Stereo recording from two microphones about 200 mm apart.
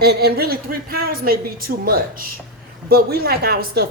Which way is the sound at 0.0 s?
50° right (ahead or behind).